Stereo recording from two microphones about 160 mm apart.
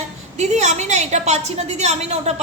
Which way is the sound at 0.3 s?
45° right (ahead or behind).